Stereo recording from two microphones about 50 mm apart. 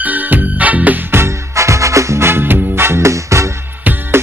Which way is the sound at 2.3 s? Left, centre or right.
Right.